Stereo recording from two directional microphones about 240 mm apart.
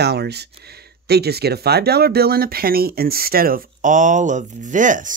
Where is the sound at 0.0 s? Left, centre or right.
Right.